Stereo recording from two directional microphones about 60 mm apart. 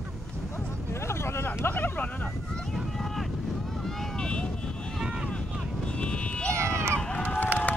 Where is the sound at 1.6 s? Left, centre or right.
Left.